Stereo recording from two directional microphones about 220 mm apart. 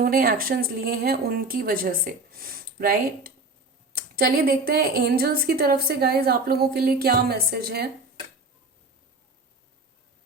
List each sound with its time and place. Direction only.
0.0 s a woman's voice: 40° right (ahead or behind)